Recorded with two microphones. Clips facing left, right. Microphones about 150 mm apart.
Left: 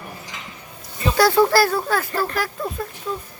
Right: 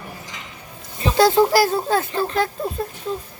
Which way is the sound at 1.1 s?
20° right (ahead or behind).